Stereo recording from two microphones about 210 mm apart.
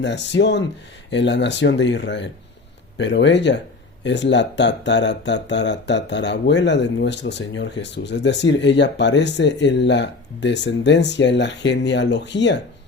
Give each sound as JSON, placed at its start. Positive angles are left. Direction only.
{"t": 0.0, "sound": "speech", "side_deg": 55}